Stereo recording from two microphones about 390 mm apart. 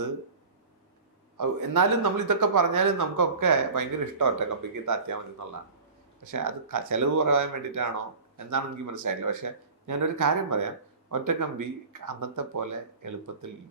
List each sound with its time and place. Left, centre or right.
1.4 s speech: right
6.3 s speech: right